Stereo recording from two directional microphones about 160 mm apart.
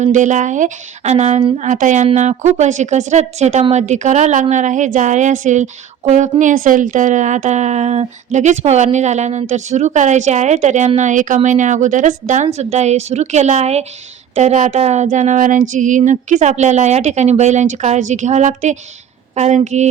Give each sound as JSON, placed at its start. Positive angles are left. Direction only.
{"t": 0.0, "sound": "a woman's voice", "side_deg": -50}